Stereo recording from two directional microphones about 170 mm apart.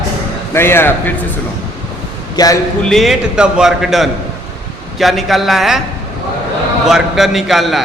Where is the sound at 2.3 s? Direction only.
20° left (ahead or behind).